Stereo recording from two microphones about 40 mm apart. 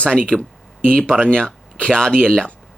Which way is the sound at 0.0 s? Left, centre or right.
Left.